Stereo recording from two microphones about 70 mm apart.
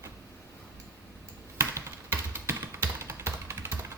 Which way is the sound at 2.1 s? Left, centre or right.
Right.